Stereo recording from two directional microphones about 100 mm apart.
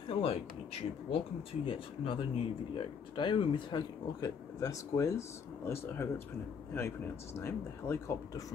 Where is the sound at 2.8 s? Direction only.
55° left (ahead or behind).